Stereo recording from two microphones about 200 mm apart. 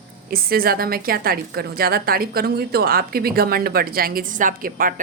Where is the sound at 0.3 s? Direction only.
50° right (ahead or behind).